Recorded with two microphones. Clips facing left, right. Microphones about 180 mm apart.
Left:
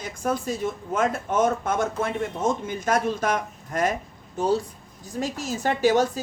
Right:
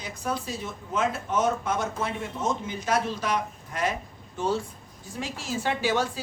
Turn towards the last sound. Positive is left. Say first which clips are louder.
# left 6 dB
turn(degrees=45)  # may be behind; listen again after turning